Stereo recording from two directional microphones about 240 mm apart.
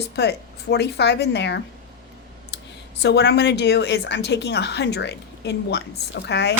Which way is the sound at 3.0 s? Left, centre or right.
Left.